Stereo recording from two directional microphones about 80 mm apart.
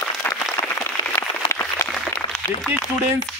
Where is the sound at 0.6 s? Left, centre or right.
Left.